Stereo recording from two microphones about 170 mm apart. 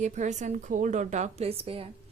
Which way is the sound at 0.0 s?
45° right (ahead or behind).